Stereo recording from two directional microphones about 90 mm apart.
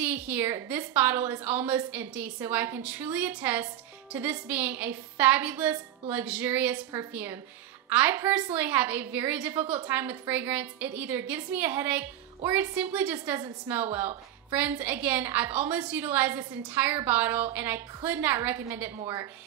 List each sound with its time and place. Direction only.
0.0 s a woman's voice: 20° right (ahead or behind)